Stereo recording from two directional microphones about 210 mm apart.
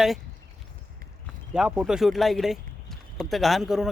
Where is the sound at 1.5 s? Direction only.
5° right (ahead or behind).